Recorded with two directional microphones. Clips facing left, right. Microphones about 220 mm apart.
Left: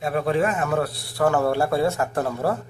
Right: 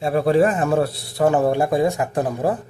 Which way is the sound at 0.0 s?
35° right (ahead or behind).